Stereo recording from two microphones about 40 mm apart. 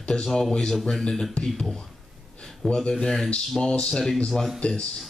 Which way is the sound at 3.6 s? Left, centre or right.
Left.